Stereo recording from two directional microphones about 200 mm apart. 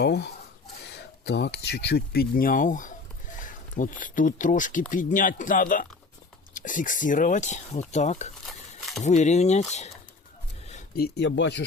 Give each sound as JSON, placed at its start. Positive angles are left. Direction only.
{"t": 0.0, "sound": "speech", "side_deg": 60}
{"t": 8.4, "sound": "a sound", "side_deg": 0}
{"t": 9.0, "sound": "speech", "side_deg": 35}